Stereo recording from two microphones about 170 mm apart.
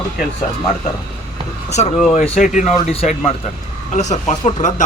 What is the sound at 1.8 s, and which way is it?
Speech, 45° left (ahead or behind).